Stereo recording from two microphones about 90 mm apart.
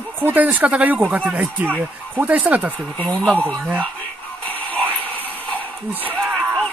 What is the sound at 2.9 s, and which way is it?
Speech, 15° left (ahead or behind).